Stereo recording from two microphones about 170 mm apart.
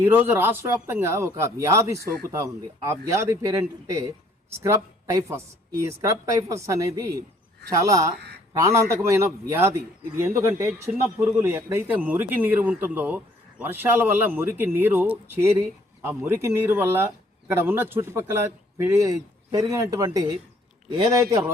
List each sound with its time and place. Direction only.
0.0 s speech: 10° right (ahead or behind)
6.0 s a man's voice: 15° right (ahead or behind)